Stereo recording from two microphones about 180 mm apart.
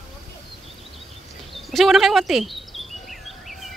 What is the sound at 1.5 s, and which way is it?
Bird vocalization, centre (ahead or behind).